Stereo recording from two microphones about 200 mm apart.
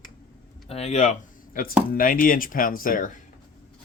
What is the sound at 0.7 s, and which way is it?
Speech, 30° left (ahead or behind).